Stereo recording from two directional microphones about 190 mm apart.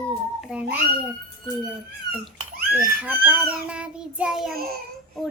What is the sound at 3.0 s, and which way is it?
Speech, 10° right (ahead or behind).